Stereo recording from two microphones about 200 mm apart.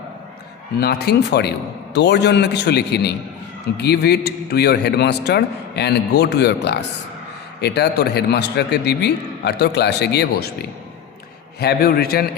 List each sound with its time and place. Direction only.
0.8 s a man's voice: 55° left (ahead or behind)
11.6 s a man's voice: 55° left (ahead or behind)